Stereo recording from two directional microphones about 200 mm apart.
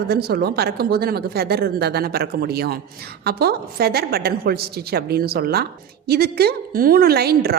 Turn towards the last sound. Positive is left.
turn(degrees=-50)  # may be behind; listen again after turning